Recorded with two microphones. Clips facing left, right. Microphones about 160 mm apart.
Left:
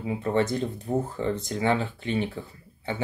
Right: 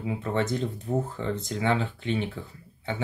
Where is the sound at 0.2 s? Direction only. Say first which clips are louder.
Left 3 dB; 35° left (ahead or behind).